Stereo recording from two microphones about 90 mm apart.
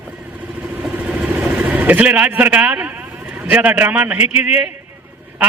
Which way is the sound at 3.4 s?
20° right (ahead or behind).